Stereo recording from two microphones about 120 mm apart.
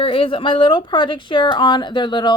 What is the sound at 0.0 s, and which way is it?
A woman's voice, 50° left (ahead or behind).